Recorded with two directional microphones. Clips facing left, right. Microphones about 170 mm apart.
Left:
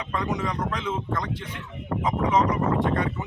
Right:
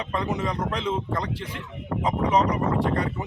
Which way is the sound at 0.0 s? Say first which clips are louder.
Right 1 dB; 30° right (ahead or behind).